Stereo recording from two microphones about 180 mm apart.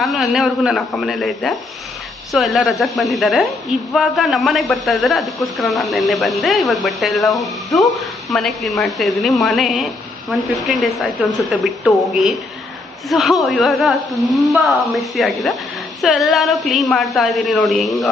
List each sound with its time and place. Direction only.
0.0 s a man's voice: centre (ahead or behind)